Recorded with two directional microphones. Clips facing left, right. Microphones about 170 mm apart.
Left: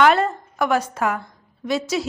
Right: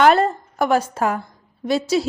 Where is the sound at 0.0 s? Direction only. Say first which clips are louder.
Right 2 dB; 35° right (ahead or behind).